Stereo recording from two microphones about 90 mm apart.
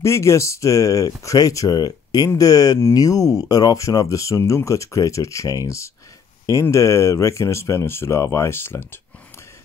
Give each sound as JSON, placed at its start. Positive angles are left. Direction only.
{"t": 0.0, "sound": "speech", "side_deg": 35}